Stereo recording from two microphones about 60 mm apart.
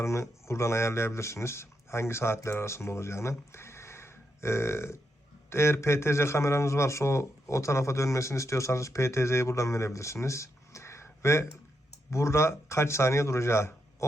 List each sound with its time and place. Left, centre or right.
0.0 s a man's voice: left